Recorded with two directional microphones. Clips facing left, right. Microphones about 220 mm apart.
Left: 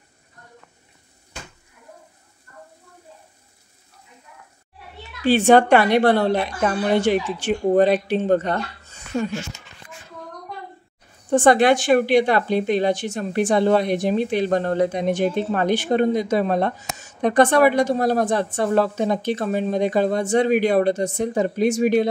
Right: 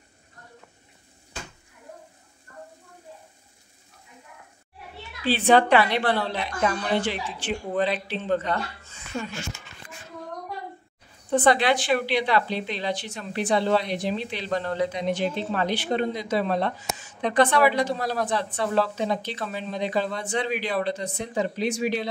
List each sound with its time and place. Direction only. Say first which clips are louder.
5.2 s speech: left 5 dB; 45° left (ahead or behind)
11.2 s speech: left 6 dB; 45° left (ahead or behind)